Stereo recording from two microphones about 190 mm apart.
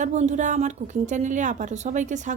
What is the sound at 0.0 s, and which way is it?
A woman's voice, 40° right (ahead or behind).